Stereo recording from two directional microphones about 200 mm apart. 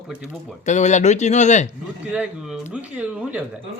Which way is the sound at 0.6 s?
35° left (ahead or behind).